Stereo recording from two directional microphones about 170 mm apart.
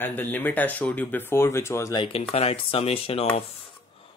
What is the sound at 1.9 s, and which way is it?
Speech, 30° left (ahead or behind).